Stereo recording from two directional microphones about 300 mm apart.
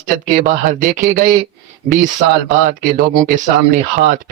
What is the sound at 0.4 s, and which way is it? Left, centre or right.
Speech, right.